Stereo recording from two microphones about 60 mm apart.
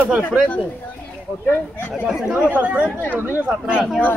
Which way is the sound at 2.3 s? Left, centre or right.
Centre.